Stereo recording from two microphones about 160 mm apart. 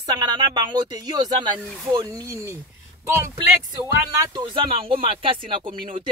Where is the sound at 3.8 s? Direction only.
25° right (ahead or behind).